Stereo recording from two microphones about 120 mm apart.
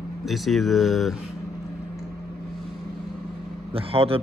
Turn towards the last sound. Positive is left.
turn(degrees=-55)  # may be behind; listen again after turning